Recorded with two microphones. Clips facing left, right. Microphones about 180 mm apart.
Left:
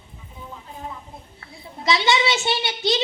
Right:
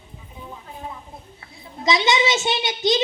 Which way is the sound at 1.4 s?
20° right (ahead or behind).